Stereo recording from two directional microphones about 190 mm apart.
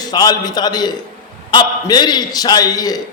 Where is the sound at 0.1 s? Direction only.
20° left (ahead or behind).